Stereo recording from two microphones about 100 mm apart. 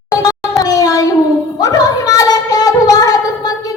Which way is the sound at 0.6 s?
40° left (ahead or behind).